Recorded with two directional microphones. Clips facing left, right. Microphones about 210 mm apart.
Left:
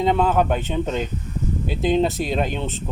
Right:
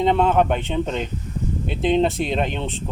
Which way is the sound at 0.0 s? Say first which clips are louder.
Right 1 dB; centre (ahead or behind).